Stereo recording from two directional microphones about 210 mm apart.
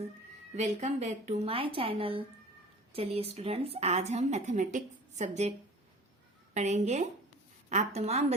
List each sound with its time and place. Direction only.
0.5 s a woman's voice: 35° right (ahead or behind)